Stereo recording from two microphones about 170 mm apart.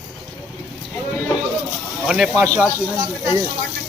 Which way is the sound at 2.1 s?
Centre (ahead or behind).